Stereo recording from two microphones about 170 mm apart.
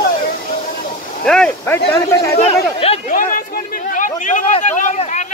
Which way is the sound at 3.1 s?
50° left (ahead or behind).